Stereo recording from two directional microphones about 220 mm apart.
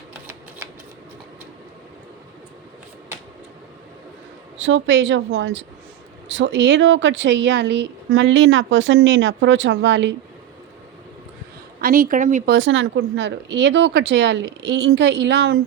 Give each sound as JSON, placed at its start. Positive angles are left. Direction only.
{"t": 4.5, "sound": "speech", "side_deg": -60}
{"t": 11.8, "sound": "a woman's voice", "side_deg": -40}
{"t": 12.5, "sound": "speech", "side_deg": -60}